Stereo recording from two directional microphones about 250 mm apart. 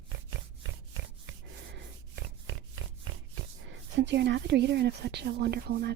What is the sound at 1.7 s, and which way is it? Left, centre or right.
Rub, right.